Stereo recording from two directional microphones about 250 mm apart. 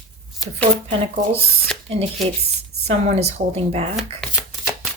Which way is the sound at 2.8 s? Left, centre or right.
Right.